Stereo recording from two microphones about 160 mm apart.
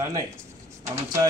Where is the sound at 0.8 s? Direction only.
20° right (ahead or behind).